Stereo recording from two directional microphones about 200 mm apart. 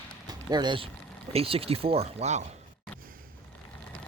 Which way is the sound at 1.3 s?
30° right (ahead or behind).